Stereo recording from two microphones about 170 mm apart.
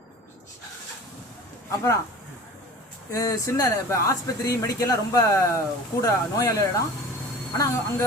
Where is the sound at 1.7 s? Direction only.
15° left (ahead or behind).